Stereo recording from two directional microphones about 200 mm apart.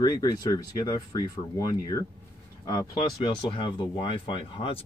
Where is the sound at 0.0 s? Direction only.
20° left (ahead or behind).